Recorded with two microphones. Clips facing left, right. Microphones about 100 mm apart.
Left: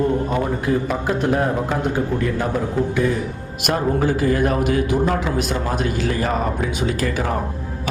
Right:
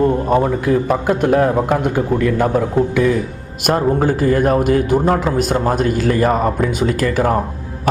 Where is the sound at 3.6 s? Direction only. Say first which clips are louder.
Right 4 dB; 40° right (ahead or behind).